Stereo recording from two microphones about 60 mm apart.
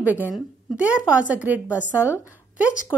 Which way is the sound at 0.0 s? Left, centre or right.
Right.